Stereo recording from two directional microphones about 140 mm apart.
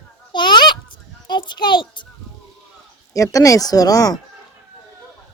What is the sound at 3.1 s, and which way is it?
Speech, 25° left (ahead or behind).